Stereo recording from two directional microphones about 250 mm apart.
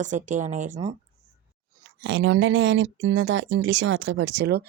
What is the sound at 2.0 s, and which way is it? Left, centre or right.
Speech, right.